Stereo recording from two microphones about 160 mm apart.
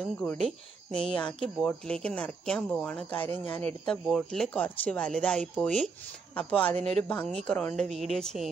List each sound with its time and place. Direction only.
0.0 s speech: 5° left (ahead or behind)
6.8 s speech: 40° right (ahead or behind)
7.4 s speech: 10° left (ahead or behind)